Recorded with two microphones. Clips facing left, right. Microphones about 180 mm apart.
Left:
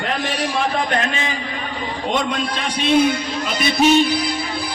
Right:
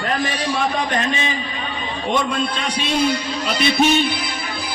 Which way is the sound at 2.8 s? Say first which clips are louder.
Left 5 dB; 55° left (ahead or behind).